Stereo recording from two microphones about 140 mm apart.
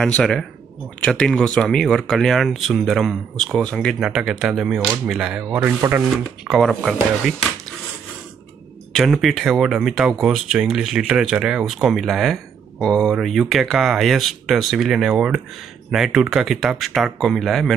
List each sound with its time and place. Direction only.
0.2 s speech: 5° left (ahead or behind); by 6.0 s 15° right (ahead or behind)
6.1 s speech: centre (ahead or behind)
8.9 s speech: centre (ahead or behind)